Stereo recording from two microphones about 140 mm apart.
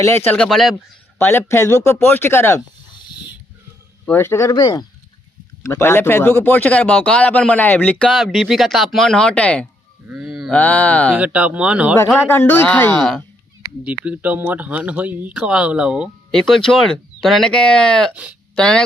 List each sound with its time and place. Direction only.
0.3 s speech: 5° left (ahead or behind)
1.2 s speech: 20° left (ahead or behind)
4.1 s speech: 20° left (ahead or behind)
5.6 s speech: 15° left (ahead or behind)
10.1 s a sound: 5° right (ahead or behind)
10.5 s speech: 10° left (ahead or behind)
11.1 s speech: 10° right (ahead or behind)
12.1 s speech: 15° left (ahead or behind)
13.0 s speech: centre (ahead or behind)
13.8 s speech: 10° right (ahead or behind)
16.3 s speech: 5° left (ahead or behind)
18.1 s speech: 10° right (ahead or behind)
18.5 s speech: 5° left (ahead or behind)